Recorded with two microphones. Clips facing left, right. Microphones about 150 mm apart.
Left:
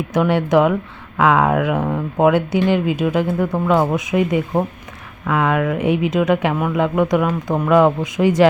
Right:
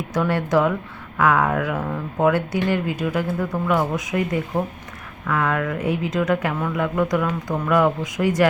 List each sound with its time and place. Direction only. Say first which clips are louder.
0.1 s speech: left 4 dB; 20° left (ahead or behind)